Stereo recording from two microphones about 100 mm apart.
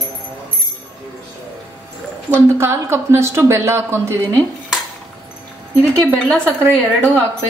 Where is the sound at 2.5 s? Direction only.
25° right (ahead or behind).